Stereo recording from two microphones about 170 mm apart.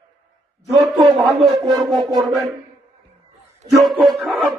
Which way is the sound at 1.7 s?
Centre (ahead or behind).